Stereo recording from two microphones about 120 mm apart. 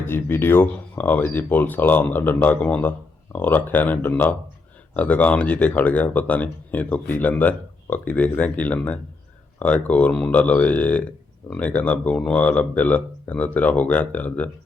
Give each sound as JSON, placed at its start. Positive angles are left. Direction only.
{"t": 0.0, "sound": "speech", "side_deg": 20}